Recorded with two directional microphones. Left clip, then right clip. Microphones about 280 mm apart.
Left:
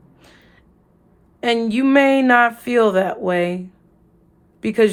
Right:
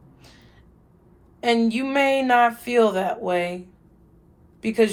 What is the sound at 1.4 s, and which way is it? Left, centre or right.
Speech, left.